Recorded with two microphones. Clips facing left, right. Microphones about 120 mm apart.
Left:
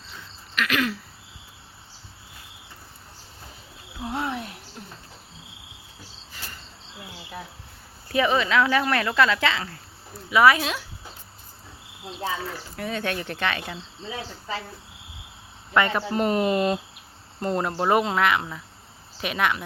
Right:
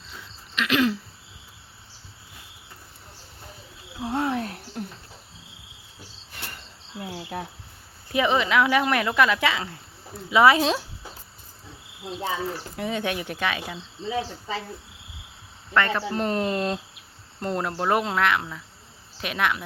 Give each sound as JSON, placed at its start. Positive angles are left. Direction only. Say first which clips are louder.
{"t": 0.5, "sound": "speech", "louder": "right 3 dB", "side_deg": -25}
{"t": 4.2, "sound": "a sound", "louder": "right 5 dB", "side_deg": -35}
{"t": 4.8, "sound": "cricket", "louder": "right 10 dB", "side_deg": -55}
{"t": 6.3, "sound": "cricket", "louder": "right 2 dB", "side_deg": -60}
{"t": 7.1, "sound": "cricket", "louder": "right 5 dB", "side_deg": -50}
{"t": 8.0, "sound": "speech", "louder": "even", "side_deg": -20}
{"t": 12.2, "sound": "speech", "louder": "right 1 dB", "side_deg": -20}
{"t": 15.7, "sound": "speech", "louder": "left 1 dB", "side_deg": 10}